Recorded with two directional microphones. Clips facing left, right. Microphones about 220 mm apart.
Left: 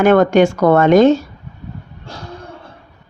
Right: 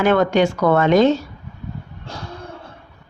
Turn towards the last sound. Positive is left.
turn(degrees=50)  # may be behind; listen again after turning